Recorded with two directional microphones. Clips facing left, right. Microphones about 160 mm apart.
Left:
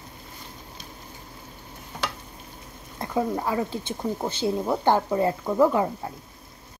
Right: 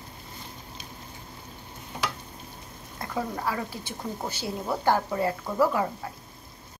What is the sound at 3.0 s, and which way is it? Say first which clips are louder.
Speech: left 6 dB; 20° left (ahead or behind).